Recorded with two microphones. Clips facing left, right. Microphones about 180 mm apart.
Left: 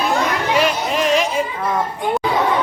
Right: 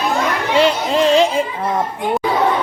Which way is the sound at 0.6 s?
30° right (ahead or behind).